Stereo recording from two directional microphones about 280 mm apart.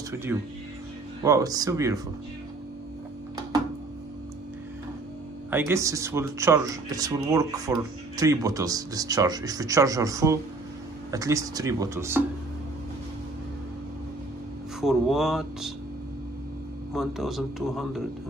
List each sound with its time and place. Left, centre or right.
0.3 s speech: centre
5.5 s speech: centre
14.8 s a man's voice: centre
16.9 s a man's voice: centre